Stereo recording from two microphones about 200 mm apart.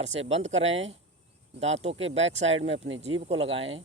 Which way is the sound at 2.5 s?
70° right (ahead or behind).